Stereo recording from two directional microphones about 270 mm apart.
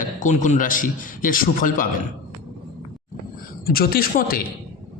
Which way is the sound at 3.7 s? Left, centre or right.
Left.